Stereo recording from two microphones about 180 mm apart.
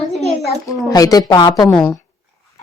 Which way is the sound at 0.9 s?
20° left (ahead or behind).